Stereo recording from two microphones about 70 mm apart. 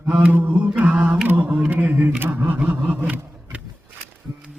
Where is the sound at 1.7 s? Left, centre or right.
Right.